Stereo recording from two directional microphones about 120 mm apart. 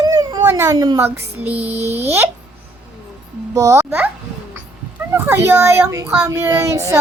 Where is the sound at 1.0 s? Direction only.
15° right (ahead or behind).